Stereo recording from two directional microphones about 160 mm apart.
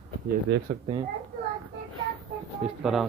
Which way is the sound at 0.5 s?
90° right.